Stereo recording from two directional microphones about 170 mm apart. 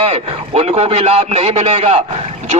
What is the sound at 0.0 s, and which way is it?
A man's voice, 35° right (ahead or behind).